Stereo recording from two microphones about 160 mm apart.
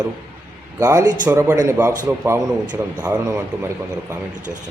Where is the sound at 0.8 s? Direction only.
20° right (ahead or behind).